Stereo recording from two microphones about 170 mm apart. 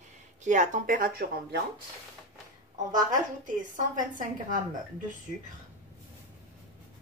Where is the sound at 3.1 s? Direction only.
50° right (ahead or behind).